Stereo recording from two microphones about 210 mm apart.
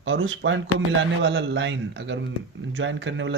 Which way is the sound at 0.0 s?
65° right (ahead or behind).